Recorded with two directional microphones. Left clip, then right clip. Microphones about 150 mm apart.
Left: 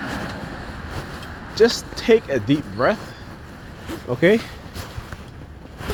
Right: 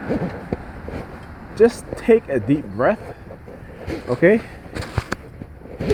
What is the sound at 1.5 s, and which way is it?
Speech, 65° right (ahead or behind).